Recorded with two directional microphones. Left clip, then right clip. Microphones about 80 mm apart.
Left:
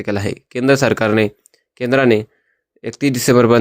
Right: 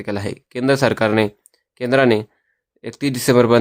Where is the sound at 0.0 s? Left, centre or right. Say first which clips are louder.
Left 4 dB; left.